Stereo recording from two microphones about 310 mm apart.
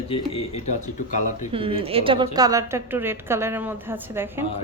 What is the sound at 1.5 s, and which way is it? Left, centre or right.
A woman's voice, centre.